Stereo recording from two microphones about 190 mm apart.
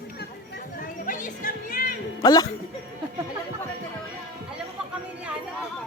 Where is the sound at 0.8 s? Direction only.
45° left (ahead or behind).